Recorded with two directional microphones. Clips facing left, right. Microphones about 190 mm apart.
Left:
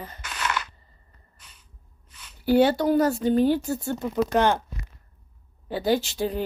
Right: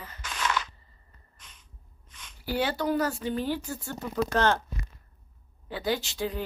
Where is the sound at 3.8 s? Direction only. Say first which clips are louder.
Left 3 dB; 15° left (ahead or behind).